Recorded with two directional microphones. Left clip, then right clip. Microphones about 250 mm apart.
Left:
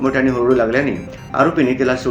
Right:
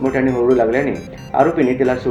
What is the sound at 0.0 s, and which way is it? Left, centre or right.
Speech, centre.